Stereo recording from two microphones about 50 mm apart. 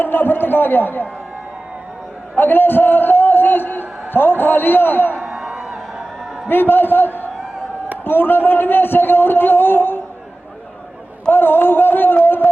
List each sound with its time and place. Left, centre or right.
0.0 s a man's voice: left
2.3 s a man's voice: left
5.3 s a sound: centre
6.5 s a man's voice: left
11.3 s a man's voice: left